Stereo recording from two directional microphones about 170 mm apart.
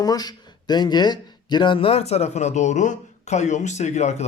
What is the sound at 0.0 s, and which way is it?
Speech, 25° left (ahead or behind).